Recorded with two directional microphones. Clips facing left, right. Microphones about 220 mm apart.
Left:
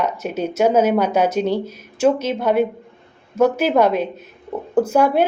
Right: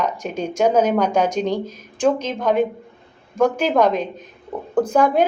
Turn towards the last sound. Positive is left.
turn(degrees=10)  # may be behind; listen again after turning